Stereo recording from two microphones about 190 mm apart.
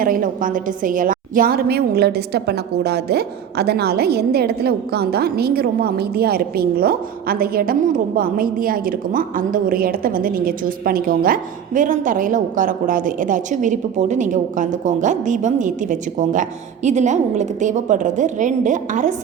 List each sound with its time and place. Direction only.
0.0 s a woman's voice: 45° right (ahead or behind)